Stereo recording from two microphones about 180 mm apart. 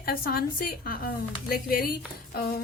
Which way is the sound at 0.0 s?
55° left (ahead or behind).